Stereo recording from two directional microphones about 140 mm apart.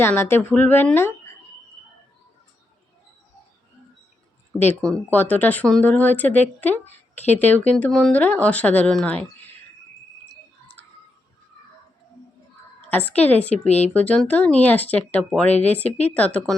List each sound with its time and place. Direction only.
0.0 s speech: 15° left (ahead or behind)
4.5 s speech: 15° left (ahead or behind)
12.9 s speech: 10° left (ahead or behind)
13.7 s speech: 50° left (ahead or behind)
13.9 s speech: 5° left (ahead or behind)